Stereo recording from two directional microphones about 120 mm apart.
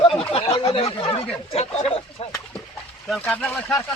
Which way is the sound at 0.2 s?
50° left (ahead or behind).